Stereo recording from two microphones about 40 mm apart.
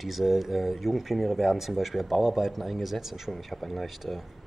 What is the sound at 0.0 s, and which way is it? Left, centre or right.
Speech, centre.